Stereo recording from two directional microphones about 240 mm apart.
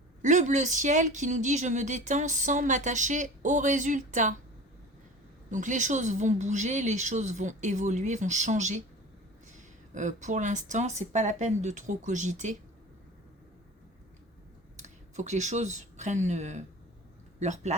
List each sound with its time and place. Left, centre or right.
0.2 s speech: right
5.5 s speech: right
14.8 s speech: right